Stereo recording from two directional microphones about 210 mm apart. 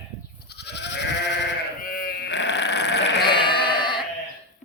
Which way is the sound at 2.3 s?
55° left (ahead or behind).